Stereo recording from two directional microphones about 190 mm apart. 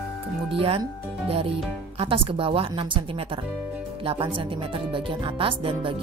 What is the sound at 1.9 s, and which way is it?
Speech, 30° right (ahead or behind).